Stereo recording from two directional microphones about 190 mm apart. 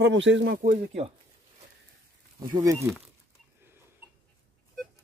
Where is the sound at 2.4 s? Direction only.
20° right (ahead or behind).